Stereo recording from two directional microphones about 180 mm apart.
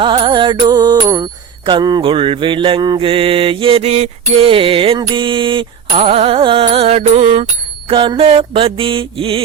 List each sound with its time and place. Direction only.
0.0 s music: 25° right (ahead or behind)
7.9 s mantra: 30° right (ahead or behind)